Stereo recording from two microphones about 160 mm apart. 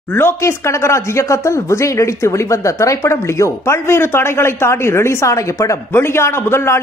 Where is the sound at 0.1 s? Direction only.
15° left (ahead or behind).